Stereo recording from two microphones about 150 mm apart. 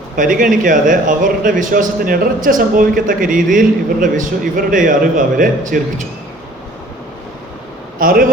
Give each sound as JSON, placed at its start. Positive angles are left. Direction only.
{"t": 0.2, "sound": "a man's voice", "side_deg": -65}
{"t": 7.9, "sound": "speech", "side_deg": -70}